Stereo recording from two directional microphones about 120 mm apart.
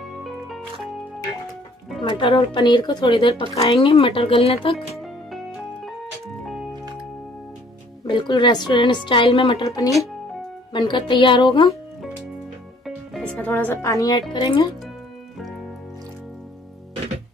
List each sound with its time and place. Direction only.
0.2 s music: centre (ahead or behind)
2.0 s a woman's voice: 45° left (ahead or behind)
3.3 s speech: 55° left (ahead or behind)
4.7 s music: centre (ahead or behind)
6.4 s music: centre (ahead or behind)
8.0 s a woman's voice: 40° left (ahead or behind)
9.6 s speech: 30° left (ahead or behind)
10.7 s speech: 40° left (ahead or behind)
12.8 s music: 5° left (ahead or behind)
13.8 s speech: 30° left (ahead or behind)
14.3 s a woman's voice: 40° left (ahead or behind)